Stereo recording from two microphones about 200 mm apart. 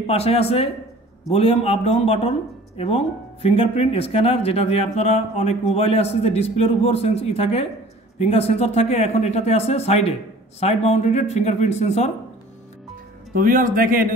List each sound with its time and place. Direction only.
0.0 s speech: 30° left (ahead or behind)
13.3 s speech: 45° right (ahead or behind)